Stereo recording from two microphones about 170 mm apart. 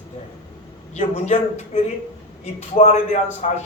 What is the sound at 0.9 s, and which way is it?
A man's voice, 40° left (ahead or behind).